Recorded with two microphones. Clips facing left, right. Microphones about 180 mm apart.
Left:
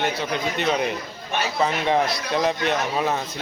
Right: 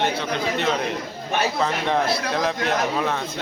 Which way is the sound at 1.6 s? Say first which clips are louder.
Left 5 dB; centre (ahead or behind).